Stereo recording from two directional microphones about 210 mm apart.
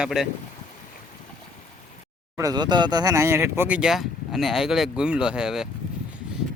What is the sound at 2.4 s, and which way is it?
Speech, 20° right (ahead or behind).